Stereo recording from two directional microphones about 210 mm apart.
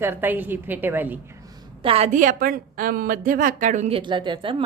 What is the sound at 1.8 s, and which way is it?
A woman's voice, 30° right (ahead or behind).